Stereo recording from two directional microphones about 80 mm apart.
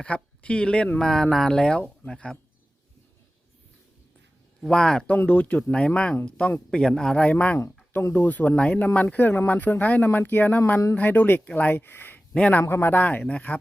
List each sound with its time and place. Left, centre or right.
0.0 s speech: centre
4.7 s speech: centre
5.1 s speech: left
7.6 s a sound: left
8.1 s speech: left
12.6 s speech: left